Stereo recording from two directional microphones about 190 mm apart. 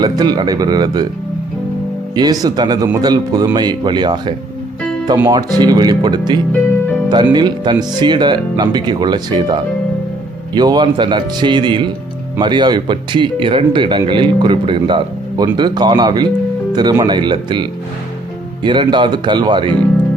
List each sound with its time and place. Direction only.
0.0 s speech: 20° right (ahead or behind)
2.1 s speech: 20° right (ahead or behind)